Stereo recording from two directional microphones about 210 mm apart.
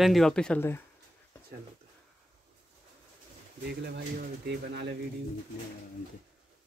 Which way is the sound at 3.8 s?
50° right (ahead or behind).